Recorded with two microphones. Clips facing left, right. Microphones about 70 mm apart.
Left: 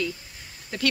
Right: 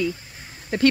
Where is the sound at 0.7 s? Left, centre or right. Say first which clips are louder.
Right 8 dB; right.